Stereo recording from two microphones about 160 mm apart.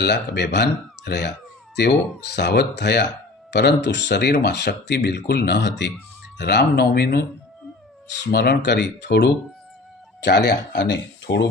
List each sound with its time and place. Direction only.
0.0 s speech: 90° left